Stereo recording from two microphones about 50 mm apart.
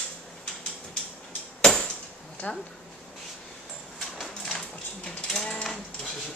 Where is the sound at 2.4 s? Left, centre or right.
Left.